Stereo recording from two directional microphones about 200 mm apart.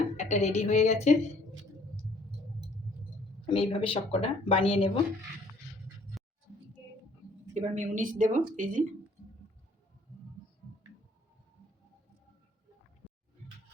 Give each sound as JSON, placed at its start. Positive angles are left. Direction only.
{"t": 0.2, "sound": "a woman's voice", "side_deg": 35}
{"t": 3.4, "sound": "speech", "side_deg": 25}
{"t": 7.5, "sound": "a woman's voice", "side_deg": -40}